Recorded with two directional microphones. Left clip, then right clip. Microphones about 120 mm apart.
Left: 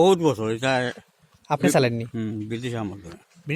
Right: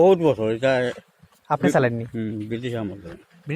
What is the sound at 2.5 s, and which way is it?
Speech, 45° left (ahead or behind).